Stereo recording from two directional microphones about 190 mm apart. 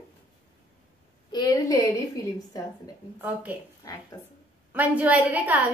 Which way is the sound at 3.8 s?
20° left (ahead or behind).